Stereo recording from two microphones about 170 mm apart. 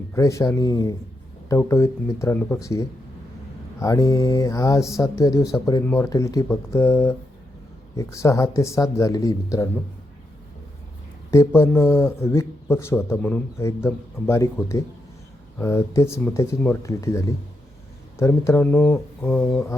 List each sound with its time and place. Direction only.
0.1 s speech: 15° left (ahead or behind)
11.3 s speech: 15° left (ahead or behind)